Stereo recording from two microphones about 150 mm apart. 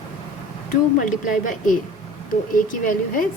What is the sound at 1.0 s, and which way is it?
A woman's voice, 60° left (ahead or behind).